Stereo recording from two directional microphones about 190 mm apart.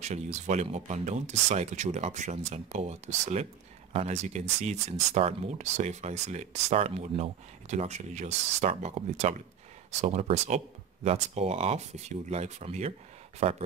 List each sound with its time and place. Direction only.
0.0 s speech: 40° right (ahead or behind)